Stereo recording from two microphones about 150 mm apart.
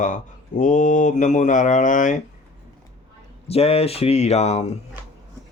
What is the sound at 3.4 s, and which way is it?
Speech, 40° left (ahead or behind).